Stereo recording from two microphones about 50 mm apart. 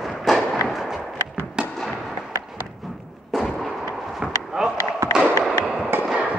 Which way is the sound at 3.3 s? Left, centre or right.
Centre.